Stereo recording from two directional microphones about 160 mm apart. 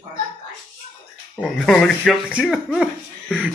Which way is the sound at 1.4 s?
5° left (ahead or behind).